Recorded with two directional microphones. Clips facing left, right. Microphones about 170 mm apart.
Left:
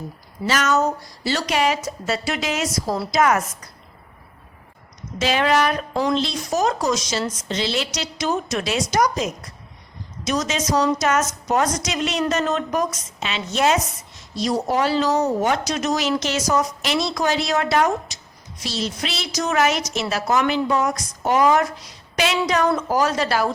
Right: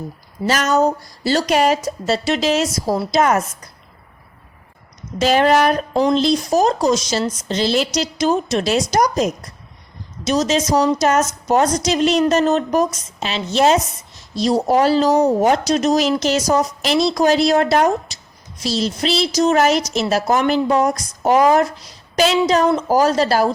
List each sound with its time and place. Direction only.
0.4 s a woman's voice: 40° right (ahead or behind)
5.2 s a woman's voice: 40° right (ahead or behind)
5.9 s speech: 20° right (ahead or behind)
6.1 s a woman's voice: 40° right (ahead or behind)